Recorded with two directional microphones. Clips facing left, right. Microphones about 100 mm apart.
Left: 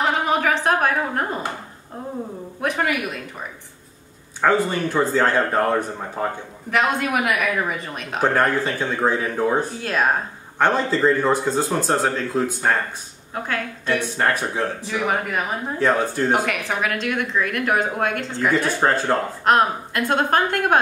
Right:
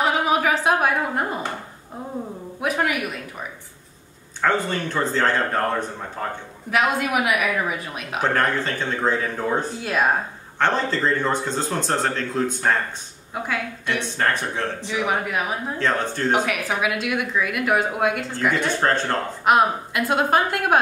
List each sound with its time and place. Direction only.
0.0 s a sound: 5° right (ahead or behind)
2.6 s a sound: 5° right (ahead or behind)
4.4 s speech: 10° left (ahead or behind)
6.7 s a woman's voice: 5° right (ahead or behind)
8.2 s speech: 10° left (ahead or behind)
9.8 s speech: 5° right (ahead or behind)
10.6 s a woman's voice: 10° left (ahead or behind)
13.9 s speech: 10° left (ahead or behind)
14.9 s a woman's voice: 5° right (ahead or behind)
15.8 s speech: 10° left (ahead or behind)
16.3 s a woman's voice: 5° right (ahead or behind)
19.4 s a woman's voice: 5° right (ahead or behind)